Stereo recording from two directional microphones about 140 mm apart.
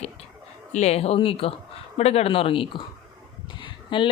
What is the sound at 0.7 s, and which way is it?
Speech, 50° left (ahead or behind).